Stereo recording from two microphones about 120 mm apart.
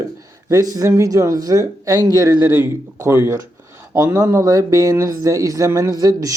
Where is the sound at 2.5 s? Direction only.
20° right (ahead or behind).